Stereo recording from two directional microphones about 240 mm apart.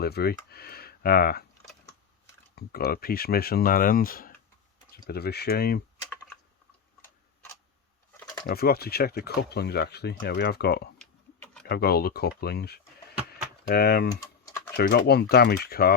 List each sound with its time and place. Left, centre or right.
0.0 s speech: left
2.6 s speech: left
8.4 s speech: left
10.9 s typing: centre
11.6 s speech: left
14.1 s typing: centre
14.8 s speech: left